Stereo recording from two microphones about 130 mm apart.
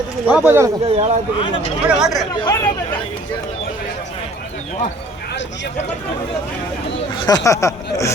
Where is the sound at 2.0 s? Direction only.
Centre (ahead or behind).